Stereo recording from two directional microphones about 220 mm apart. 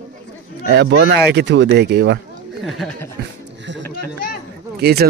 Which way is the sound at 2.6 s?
Centre (ahead or behind).